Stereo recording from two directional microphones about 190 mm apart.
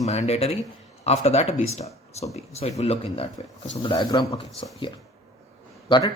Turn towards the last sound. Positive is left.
turn(degrees=25)  # may be behind; listen again after turning